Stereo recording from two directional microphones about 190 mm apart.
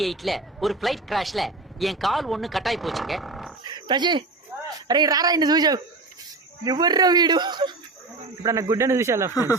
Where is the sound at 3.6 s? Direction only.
20° right (ahead or behind).